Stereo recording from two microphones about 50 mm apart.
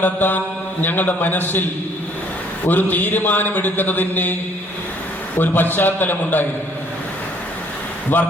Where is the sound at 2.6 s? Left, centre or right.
Left.